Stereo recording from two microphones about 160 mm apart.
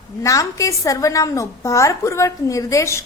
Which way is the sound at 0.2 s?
20° left (ahead or behind).